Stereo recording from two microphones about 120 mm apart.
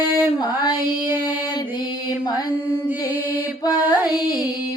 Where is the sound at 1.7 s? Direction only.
35° left (ahead or behind).